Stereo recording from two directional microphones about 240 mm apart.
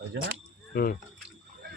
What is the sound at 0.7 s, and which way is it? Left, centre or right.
Speech, left.